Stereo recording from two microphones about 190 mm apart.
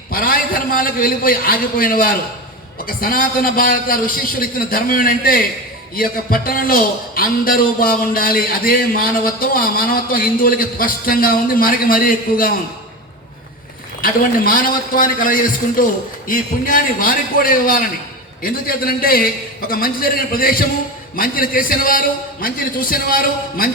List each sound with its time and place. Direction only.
0.1 s a man's voice: 50° left (ahead or behind)
14.0 s a man's voice: 50° left (ahead or behind)